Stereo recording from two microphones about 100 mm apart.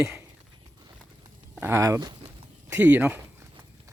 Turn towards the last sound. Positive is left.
turn(degrees=-15)  # may be behind; listen again after turning